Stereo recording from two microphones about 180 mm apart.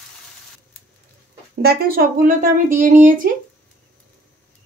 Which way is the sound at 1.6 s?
60° right (ahead or behind).